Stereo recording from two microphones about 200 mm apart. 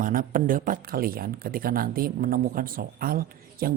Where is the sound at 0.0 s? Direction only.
45° right (ahead or behind).